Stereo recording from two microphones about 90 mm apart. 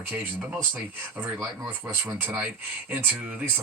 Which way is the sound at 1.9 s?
20° right (ahead or behind).